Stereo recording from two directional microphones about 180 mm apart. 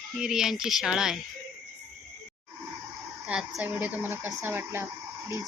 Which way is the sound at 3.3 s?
5° right (ahead or behind).